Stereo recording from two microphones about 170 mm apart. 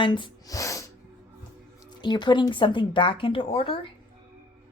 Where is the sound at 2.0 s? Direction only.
25° left (ahead or behind).